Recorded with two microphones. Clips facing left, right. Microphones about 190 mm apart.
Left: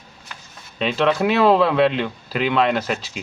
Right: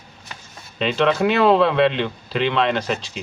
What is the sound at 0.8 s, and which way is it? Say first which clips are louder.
Speech: right 1 dB; centre (ahead or behind).